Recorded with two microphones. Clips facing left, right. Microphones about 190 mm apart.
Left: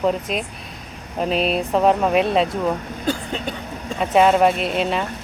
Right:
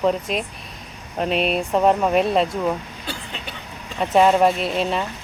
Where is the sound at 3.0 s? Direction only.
45° left (ahead or behind).